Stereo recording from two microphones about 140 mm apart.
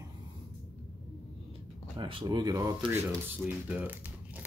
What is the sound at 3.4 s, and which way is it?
Speech, 10° right (ahead or behind).